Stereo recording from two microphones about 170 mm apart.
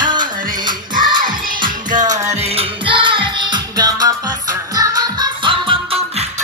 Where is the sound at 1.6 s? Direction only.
25° right (ahead or behind).